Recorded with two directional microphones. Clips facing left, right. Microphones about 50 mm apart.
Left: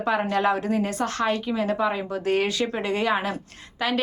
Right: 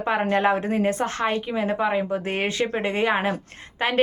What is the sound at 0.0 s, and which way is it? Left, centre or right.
A woman's voice, right.